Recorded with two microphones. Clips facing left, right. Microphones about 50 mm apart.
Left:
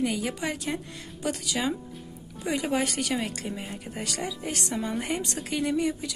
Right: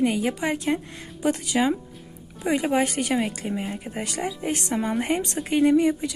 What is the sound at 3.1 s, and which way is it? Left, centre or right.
Speech, centre.